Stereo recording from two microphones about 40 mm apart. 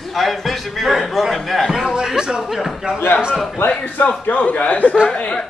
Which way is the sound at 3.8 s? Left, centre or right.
Left.